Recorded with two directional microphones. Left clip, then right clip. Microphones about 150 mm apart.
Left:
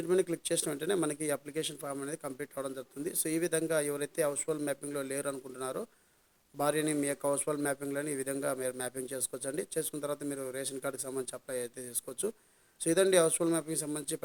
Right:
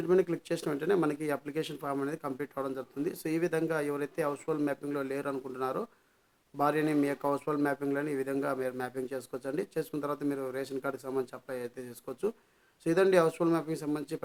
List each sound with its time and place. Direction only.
0.1 s speech: 30° left (ahead or behind)